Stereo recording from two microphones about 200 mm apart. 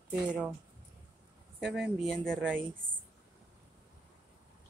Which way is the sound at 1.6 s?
5° right (ahead or behind).